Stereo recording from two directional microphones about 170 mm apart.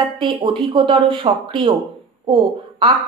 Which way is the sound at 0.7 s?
30° right (ahead or behind).